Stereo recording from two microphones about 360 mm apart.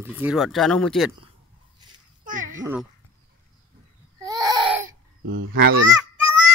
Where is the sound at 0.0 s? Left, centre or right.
Centre.